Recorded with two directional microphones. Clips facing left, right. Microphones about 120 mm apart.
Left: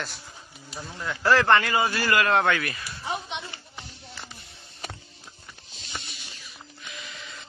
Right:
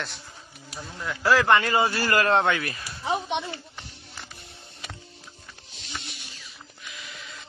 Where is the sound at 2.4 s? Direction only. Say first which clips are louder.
Even; 25° right (ahead or behind).